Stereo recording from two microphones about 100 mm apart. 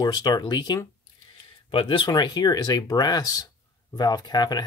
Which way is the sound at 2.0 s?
45° left (ahead or behind).